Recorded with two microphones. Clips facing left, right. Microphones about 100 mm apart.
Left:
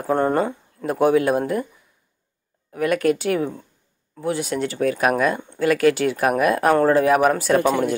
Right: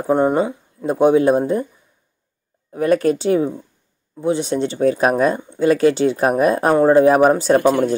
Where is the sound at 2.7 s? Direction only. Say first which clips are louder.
Right 3 dB; 30° right (ahead or behind).